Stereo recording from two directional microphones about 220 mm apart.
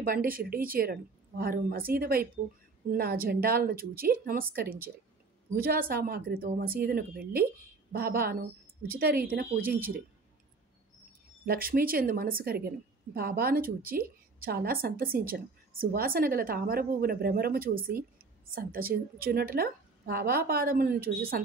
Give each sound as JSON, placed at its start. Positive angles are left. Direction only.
{"t": 0.0, "sound": "a woman's voice", "side_deg": -40}
{"t": 11.4, "sound": "a woman's voice", "side_deg": -40}